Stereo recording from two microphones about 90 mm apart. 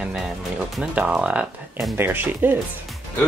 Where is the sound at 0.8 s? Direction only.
15° right (ahead or behind).